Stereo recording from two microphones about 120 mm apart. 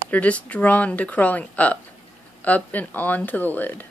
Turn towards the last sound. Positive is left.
turn(degrees=15)  # may be behind; listen again after turning